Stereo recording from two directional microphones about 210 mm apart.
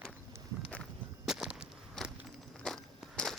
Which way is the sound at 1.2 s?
5° right (ahead or behind).